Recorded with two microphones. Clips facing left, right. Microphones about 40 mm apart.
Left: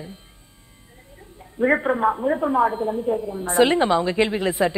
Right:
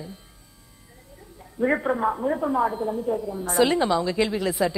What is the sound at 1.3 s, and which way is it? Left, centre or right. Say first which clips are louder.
A woman's voice: left 4 dB; left.